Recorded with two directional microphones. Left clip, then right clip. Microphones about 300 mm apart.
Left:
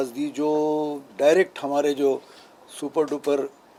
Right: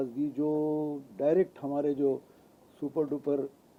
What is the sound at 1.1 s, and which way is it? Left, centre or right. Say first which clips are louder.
A man's voice: left 9 dB; centre.